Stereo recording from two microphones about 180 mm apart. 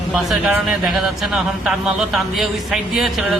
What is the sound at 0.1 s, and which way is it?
A man's voice, 5° right (ahead or behind).